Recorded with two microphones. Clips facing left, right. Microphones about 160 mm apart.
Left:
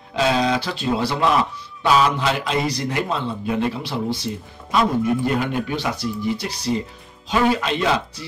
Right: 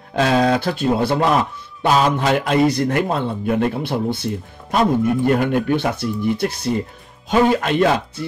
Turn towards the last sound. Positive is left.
turn(degrees=-50)  # may be behind; listen again after turning